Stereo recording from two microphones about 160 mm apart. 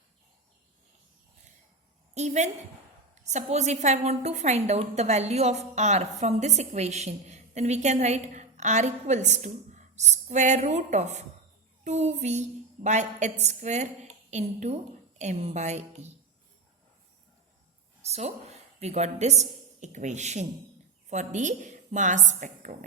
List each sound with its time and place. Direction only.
2.1 s a woman's voice: 45° right (ahead or behind)
18.0 s a woman's voice: 40° right (ahead or behind)